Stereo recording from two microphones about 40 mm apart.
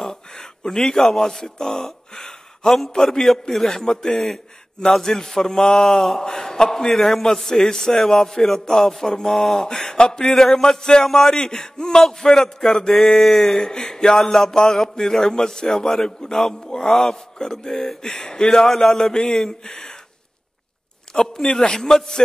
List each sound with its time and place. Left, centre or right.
0.0 s a man's voice: centre
6.9 s a man's voice: centre
21.2 s a man's voice: centre